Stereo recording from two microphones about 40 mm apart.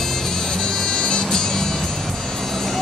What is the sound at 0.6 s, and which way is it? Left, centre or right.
Music, centre.